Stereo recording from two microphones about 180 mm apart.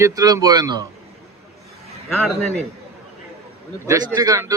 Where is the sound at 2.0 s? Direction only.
Centre (ahead or behind).